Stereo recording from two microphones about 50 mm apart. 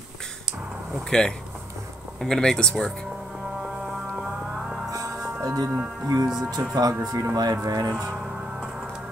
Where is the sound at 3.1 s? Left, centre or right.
Centre.